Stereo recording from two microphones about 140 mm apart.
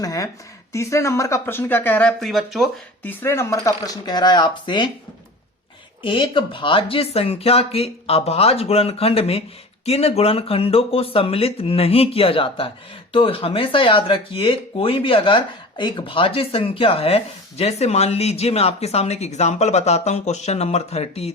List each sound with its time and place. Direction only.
0.0 s speech: 25° left (ahead or behind); by 2.6 s centre (ahead or behind)
3.0 s speech: 15° left (ahead or behind); by 4.9 s 35° left (ahead or behind)
6.0 s speech: 40° left (ahead or behind)